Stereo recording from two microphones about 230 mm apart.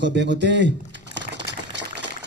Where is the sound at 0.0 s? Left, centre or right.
Right.